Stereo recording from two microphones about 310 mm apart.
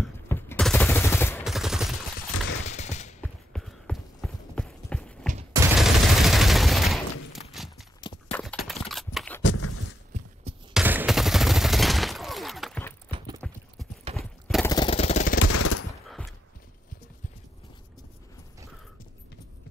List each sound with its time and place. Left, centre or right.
0.0 s fusillade: centre
2.1 s fusillade: left
3.2 s clip-clop: centre
5.5 s fusillade: centre
8.0 s clip-clop: centre
8.6 s typing: centre
9.4 s a sound: left
10.1 s a sound: right
10.7 s fusillade: centre
13.4 s clip-clop: centre
14.1 s clip-clop: centre
14.5 s jackhammer: centre
15.3 s gunshot: left
16.1 s a sound: centre